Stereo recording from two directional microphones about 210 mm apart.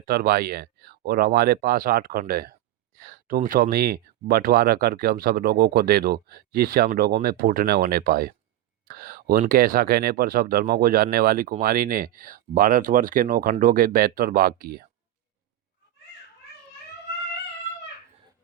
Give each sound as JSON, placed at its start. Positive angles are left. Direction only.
{"t": 0.0, "sound": "speech", "side_deg": -45}